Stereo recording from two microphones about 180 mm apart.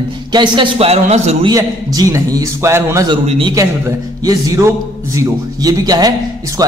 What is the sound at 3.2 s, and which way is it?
Speech, 35° right (ahead or behind).